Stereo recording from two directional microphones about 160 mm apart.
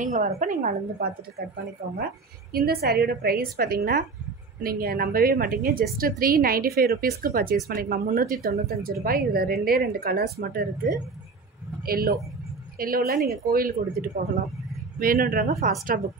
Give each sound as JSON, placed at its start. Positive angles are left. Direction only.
{"t": 0.0, "sound": "a woman's voice", "side_deg": -50}
{"t": 2.5, "sound": "a woman's voice", "side_deg": -75}